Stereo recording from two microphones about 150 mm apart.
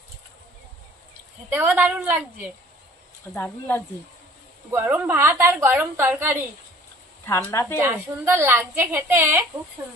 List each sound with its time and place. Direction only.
1.5 s a woman's voice: 10° right (ahead or behind)
3.3 s speech: 15° left (ahead or behind)
4.6 s a woman's voice: 15° right (ahead or behind)
7.2 s speech: 20° left (ahead or behind)
7.8 s a woman's voice: 15° right (ahead or behind)